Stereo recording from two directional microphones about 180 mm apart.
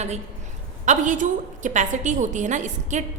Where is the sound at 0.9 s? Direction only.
45° right (ahead or behind).